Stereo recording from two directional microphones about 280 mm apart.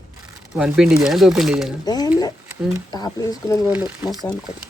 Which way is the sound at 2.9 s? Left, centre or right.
Centre.